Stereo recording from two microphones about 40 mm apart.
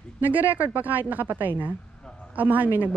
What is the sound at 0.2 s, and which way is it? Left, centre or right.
Speech, right.